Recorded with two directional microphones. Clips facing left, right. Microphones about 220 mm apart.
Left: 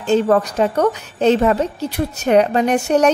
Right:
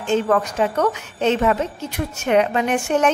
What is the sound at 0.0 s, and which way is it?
A woman's voice, 35° left (ahead or behind).